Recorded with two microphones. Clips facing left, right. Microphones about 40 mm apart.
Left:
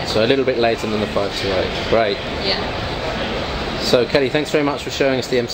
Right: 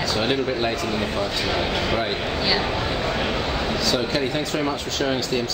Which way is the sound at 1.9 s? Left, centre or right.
Centre.